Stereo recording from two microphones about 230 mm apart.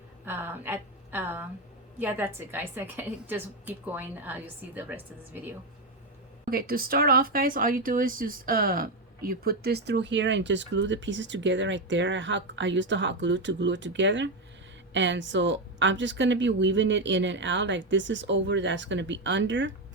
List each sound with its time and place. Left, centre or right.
0.3 s a woman's voice: centre
6.5 s speech: right